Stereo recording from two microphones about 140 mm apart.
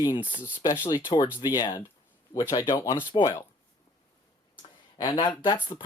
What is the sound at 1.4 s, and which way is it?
Speech, 30° left (ahead or behind).